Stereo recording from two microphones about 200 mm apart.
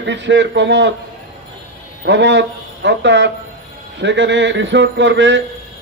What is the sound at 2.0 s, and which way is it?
A man's voice, 65° right (ahead or behind).